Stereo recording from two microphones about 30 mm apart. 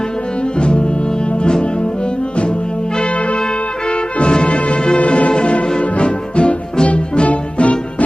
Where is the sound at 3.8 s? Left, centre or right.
Left.